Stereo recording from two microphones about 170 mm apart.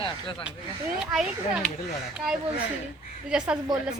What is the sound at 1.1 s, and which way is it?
Speech, centre (ahead or behind).